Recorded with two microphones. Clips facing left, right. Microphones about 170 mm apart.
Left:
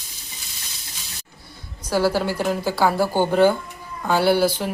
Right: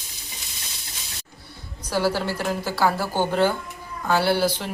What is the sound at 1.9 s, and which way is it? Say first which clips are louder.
A woman's voice: left 3 dB; 10° left (ahead or behind).